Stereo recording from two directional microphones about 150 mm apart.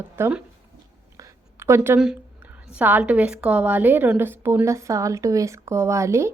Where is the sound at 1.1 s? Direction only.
15° right (ahead or behind).